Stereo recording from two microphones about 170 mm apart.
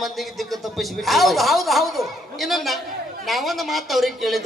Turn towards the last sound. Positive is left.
turn(degrees=0)  # may be behind; listen again after turning